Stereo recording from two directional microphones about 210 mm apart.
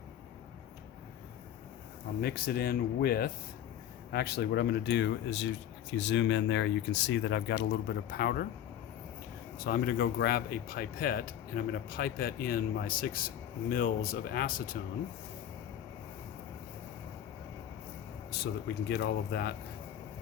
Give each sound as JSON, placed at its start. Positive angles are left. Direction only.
{"t": 2.2, "sound": "speech", "side_deg": 45}
{"t": 9.6, "sound": "speech", "side_deg": 45}
{"t": 18.9, "sound": "speech", "side_deg": 50}